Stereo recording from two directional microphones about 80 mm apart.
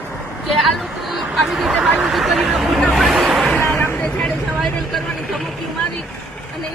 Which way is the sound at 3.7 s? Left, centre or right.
Left.